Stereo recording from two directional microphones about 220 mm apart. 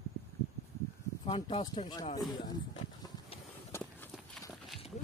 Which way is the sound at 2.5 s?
15° left (ahead or behind).